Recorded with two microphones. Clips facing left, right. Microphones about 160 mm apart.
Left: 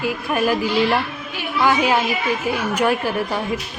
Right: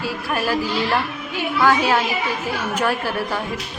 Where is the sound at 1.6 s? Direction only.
15° left (ahead or behind).